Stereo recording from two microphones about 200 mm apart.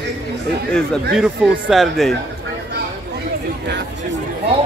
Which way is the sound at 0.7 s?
5° left (ahead or behind).